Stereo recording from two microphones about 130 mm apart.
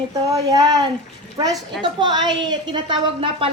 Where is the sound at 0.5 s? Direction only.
35° right (ahead or behind).